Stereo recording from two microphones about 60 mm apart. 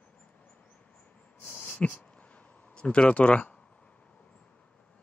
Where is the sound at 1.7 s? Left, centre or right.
Centre.